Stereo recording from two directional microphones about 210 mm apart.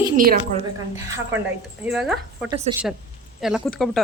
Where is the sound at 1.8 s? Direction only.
5° right (ahead or behind).